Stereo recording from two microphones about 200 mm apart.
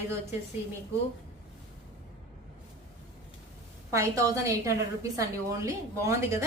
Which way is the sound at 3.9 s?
15° right (ahead or behind).